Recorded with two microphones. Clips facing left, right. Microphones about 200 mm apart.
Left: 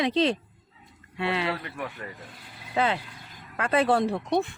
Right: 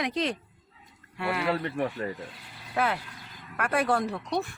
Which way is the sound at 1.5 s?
35° right (ahead or behind).